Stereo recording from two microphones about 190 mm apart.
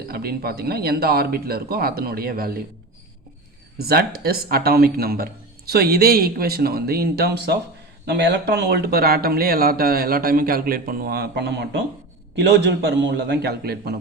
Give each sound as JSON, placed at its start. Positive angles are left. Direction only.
{"t": 0.1, "sound": "speech", "side_deg": -55}
{"t": 3.8, "sound": "speech", "side_deg": -55}